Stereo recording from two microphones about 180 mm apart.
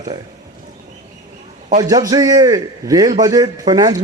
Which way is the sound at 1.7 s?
20° right (ahead or behind).